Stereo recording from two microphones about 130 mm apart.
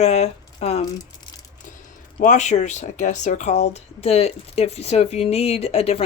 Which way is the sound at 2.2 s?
70° left (ahead or behind).